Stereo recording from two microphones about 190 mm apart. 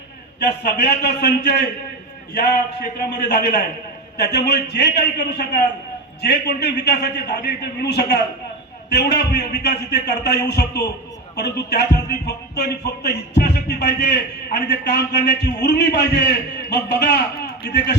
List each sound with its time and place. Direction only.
0.3 s speech: 60° left (ahead or behind)